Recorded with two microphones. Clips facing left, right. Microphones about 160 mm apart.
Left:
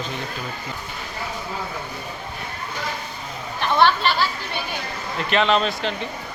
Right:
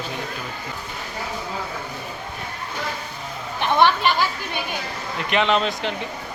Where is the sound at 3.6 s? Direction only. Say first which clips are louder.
Even; 15° right (ahead or behind).